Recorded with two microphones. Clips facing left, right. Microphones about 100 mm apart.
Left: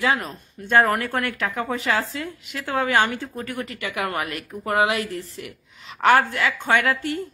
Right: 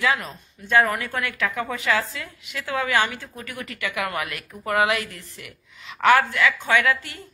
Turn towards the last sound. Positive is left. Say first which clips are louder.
# even
turn(degrees=40)  # may be behind; listen again after turning